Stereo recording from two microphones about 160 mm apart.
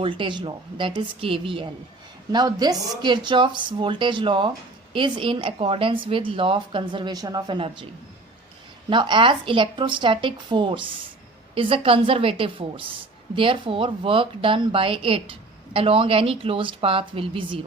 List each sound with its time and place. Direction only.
0.0 s a woman's voice: 30° right (ahead or behind)
8.9 s speech: 30° right (ahead or behind)